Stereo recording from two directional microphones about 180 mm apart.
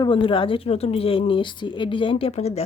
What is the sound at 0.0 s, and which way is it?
Speech, 30° left (ahead or behind).